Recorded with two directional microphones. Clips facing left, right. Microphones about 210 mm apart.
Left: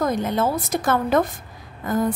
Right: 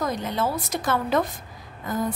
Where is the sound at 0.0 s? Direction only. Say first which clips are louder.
Left 5 dB; 50° left (ahead or behind).